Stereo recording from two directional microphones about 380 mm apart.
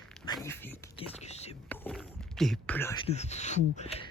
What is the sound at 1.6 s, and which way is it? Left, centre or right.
Speech, centre.